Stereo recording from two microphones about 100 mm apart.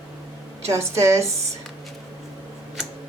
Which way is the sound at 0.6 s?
30° right (ahead or behind).